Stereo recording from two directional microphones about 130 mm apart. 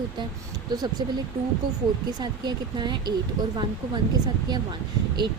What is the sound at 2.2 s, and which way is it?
Speech, 35° right (ahead or behind).